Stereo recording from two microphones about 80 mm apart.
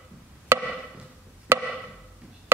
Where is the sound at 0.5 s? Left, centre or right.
Right.